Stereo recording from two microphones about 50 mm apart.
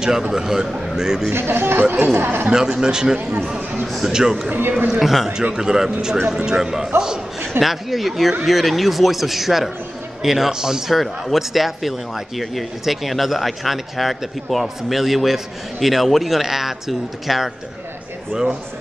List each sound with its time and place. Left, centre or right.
0.0 s a man's voice: centre
1.3 s speech: right
2.4 s a man's voice: centre
3.8 s a man's voice: centre
4.6 s a man's voice: right
4.8 s a man's voice: centre
11.0 s a man's voice: centre